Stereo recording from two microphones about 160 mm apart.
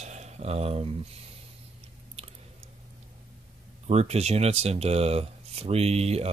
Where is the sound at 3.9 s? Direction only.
40° right (ahead or behind).